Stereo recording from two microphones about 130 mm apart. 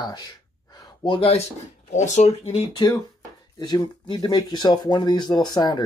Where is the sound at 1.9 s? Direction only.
65° left (ahead or behind); by 2.8 s 45° left (ahead or behind).